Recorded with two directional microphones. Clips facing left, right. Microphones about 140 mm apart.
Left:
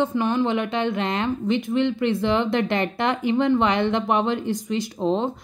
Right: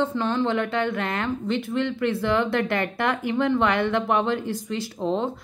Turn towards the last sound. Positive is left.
turn(degrees=20)  # may be behind; listen again after turning